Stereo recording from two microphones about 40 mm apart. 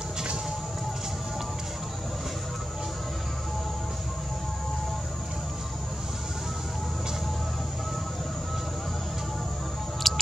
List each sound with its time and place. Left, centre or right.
10.0 s patter: centre